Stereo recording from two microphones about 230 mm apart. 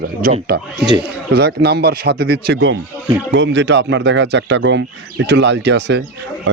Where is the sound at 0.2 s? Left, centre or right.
Right.